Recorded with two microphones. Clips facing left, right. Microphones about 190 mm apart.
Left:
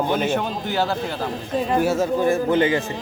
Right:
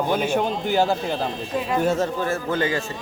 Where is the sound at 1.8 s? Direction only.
10° left (ahead or behind).